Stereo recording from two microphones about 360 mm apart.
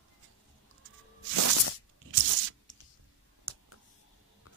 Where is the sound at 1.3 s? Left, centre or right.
Right.